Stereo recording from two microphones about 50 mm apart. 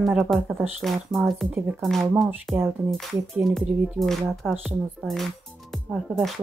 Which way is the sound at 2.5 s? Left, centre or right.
Centre.